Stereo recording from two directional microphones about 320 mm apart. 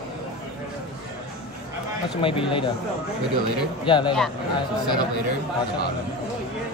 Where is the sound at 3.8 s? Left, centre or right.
Centre.